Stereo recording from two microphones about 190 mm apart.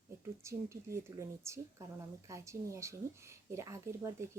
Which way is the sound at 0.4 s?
15° right (ahead or behind).